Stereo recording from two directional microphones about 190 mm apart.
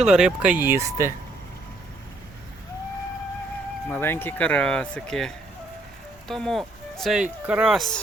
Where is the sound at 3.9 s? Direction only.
10° left (ahead or behind).